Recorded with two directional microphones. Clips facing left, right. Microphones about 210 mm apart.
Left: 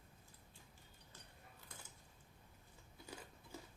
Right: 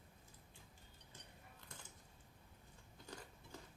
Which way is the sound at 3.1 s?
10° left (ahead or behind).